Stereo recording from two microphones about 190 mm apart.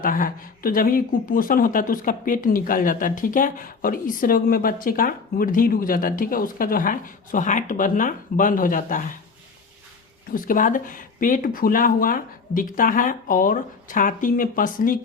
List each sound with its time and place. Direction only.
0.0 s speech: 45° left (ahead or behind)
10.3 s speech: 45° left (ahead or behind)